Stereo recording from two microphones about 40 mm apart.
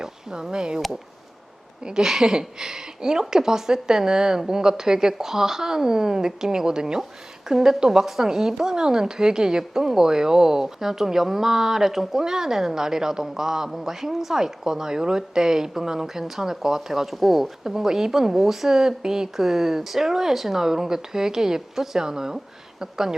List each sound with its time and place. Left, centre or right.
0.0 s speech: centre
1.8 s a woman's voice: centre